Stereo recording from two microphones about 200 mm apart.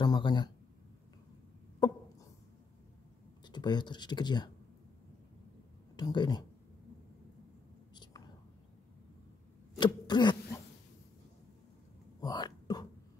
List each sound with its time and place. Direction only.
0.0 s a sound: 20° left (ahead or behind)
3.4 s speech: 20° left (ahead or behind)
5.9 s speech: 20° left (ahead or behind)
7.9 s whispering: 20° left (ahead or behind)
9.8 s a sound: 20° left (ahead or behind)
12.2 s whispering: 20° left (ahead or behind)